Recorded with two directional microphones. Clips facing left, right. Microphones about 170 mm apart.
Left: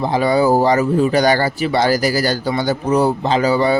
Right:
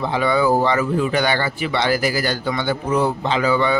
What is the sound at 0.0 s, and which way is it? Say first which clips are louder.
Speech: left 3 dB; 40° left (ahead or behind).